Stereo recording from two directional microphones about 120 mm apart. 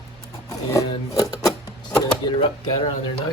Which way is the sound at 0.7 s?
30° left (ahead or behind).